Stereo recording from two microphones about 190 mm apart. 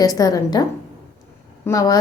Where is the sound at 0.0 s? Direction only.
20° left (ahead or behind).